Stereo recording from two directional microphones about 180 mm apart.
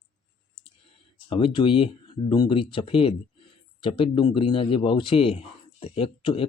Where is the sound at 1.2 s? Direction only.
30° left (ahead or behind).